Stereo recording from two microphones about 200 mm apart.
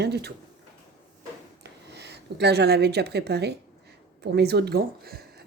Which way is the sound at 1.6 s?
60° right (ahead or behind).